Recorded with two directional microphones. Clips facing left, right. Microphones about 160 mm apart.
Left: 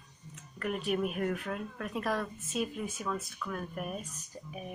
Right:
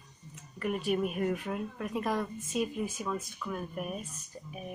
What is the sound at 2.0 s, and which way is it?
Speech, 15° right (ahead or behind).